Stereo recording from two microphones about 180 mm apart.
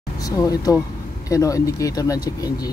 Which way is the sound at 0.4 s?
20° left (ahead or behind).